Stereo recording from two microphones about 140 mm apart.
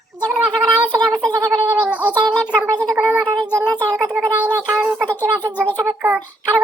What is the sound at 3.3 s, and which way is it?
Child singing, 25° right (ahead or behind).